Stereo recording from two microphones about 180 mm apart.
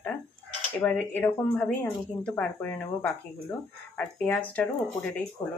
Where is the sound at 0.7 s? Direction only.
10° left (ahead or behind).